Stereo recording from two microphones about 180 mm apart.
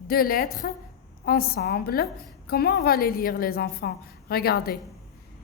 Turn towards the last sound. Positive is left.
turn(degrees=60)  # may be behind; listen again after turning